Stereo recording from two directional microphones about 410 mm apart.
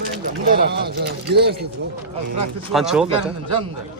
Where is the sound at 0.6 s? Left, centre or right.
Right.